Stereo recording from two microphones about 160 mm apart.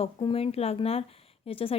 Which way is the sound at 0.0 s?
35° left (ahead or behind).